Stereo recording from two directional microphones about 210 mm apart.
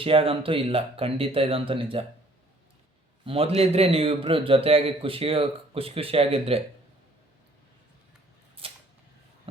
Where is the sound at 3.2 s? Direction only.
25° right (ahead or behind).